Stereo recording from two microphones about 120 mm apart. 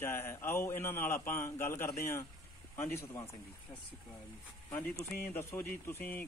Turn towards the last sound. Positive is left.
turn(degrees=15)  # may be behind; listen again after turning